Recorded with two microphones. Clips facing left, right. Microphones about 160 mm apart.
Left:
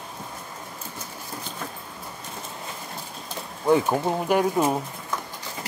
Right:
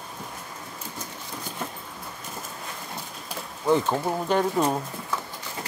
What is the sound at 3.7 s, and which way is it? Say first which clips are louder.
Speech: left 2 dB; 15° left (ahead or behind).